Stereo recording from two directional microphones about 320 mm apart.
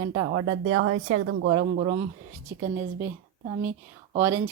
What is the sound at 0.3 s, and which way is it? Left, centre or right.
Speech, right.